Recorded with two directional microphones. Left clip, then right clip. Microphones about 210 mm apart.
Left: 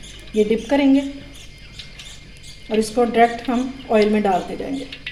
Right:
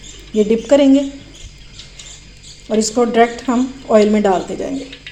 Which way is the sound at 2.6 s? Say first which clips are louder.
Right 3 dB; 35° right (ahead or behind).